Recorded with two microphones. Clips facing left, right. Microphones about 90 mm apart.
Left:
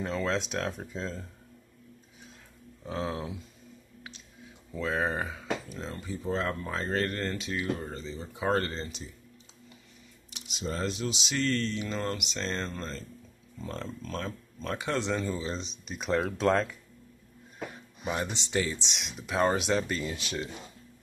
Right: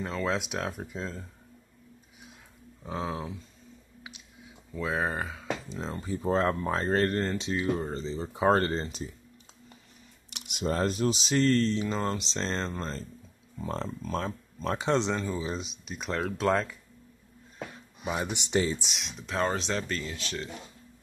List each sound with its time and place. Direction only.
0.0 s speech: 5° right (ahead or behind)
2.8 s speech: 5° right (ahead or behind)
4.7 s speech: 5° right (ahead or behind)
5.4 s speech: 20° right (ahead or behind)
6.0 s speech: 35° right (ahead or behind)
10.3 s speech: 60° right (ahead or behind); by 12.7 s 30° right (ahead or behind)
13.8 s speech: 10° right (ahead or behind)
14.2 s speech: 30° right (ahead or behind)
15.1 s speech: 10° right (ahead or behind)
18.0 s speech: 10° right (ahead or behind)
18.8 s speech: centre (ahead or behind)